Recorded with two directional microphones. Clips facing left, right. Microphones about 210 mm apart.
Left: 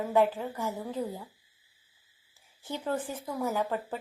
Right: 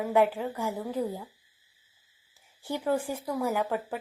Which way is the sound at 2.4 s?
15° right (ahead or behind).